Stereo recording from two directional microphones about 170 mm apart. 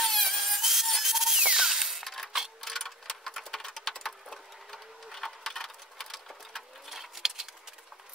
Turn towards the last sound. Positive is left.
turn(degrees=0)  # may be behind; listen again after turning